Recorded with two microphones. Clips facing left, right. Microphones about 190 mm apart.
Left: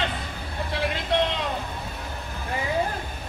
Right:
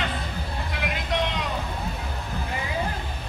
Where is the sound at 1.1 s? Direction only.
30° left (ahead or behind).